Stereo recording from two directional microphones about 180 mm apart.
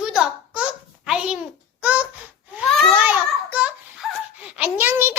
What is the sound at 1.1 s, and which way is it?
Babbling, 5° right (ahead or behind).